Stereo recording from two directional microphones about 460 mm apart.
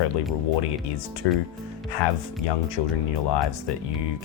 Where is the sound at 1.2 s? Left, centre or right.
Left.